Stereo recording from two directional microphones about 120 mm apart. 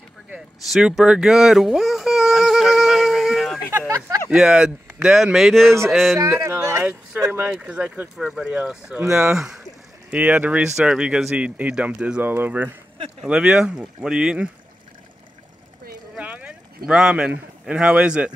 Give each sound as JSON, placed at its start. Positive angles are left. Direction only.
{"t": 0.7, "sound": "baby cry", "side_deg": 0}
{"t": 4.3, "sound": "speech", "side_deg": -5}
{"t": 6.4, "sound": "a sound", "side_deg": -25}
{"t": 8.2, "sound": "speech", "side_deg": -5}
{"t": 16.2, "sound": "speech", "side_deg": -10}